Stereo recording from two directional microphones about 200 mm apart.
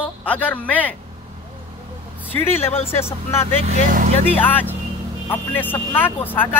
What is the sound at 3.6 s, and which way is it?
Speech, 40° right (ahead or behind).